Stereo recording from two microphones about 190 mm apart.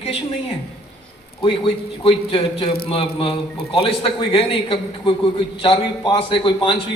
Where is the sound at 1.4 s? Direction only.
30° left (ahead or behind).